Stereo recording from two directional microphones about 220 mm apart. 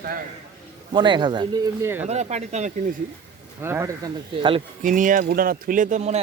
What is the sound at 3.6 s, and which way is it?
Speech, 10° right (ahead or behind).